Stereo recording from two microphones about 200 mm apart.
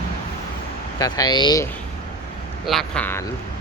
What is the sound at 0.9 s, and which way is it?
Speech, 20° left (ahead or behind).